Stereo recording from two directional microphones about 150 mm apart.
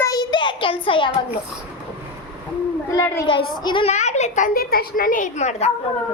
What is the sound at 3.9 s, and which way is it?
Speech, 50° left (ahead or behind).